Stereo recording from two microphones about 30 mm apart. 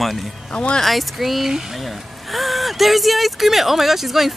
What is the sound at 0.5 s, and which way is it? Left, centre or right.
Speech, left.